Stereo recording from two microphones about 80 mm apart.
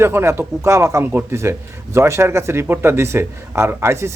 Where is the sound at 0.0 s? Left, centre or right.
Right.